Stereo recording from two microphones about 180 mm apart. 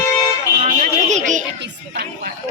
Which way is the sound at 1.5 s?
70° right (ahead or behind).